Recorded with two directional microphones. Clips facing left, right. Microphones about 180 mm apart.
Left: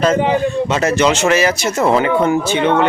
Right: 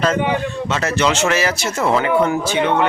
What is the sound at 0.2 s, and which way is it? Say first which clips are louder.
Speech: left 5 dB; 25° left (ahead or behind).